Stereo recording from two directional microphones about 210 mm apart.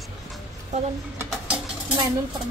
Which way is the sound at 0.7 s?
35° right (ahead or behind).